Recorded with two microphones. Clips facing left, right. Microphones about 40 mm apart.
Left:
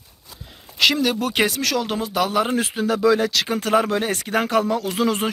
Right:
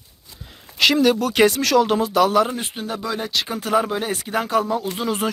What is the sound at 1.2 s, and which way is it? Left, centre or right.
Speech, left.